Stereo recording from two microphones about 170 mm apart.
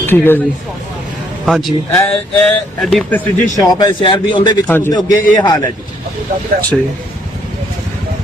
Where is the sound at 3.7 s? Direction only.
20° left (ahead or behind).